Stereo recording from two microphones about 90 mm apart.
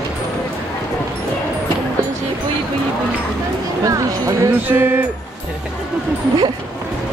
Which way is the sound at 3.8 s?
40° right (ahead or behind).